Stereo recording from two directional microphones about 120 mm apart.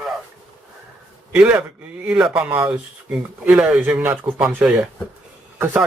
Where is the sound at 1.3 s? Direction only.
10° right (ahead or behind).